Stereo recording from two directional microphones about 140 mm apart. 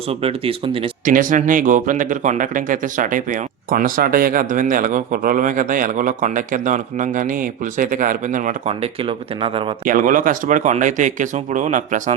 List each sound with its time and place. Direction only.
0.1 s speech: 45° right (ahead or behind)
1.0 s speech: 75° right (ahead or behind)
8.6 s speech: 40° right (ahead or behind)
9.8 s speech: 75° right (ahead or behind)